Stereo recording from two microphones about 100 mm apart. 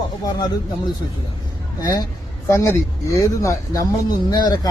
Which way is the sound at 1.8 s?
40° left (ahead or behind).